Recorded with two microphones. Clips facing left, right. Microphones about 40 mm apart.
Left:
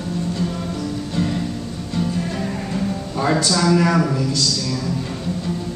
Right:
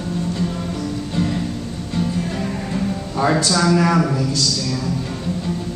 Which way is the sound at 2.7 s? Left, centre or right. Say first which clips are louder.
Right 1 dB; centre.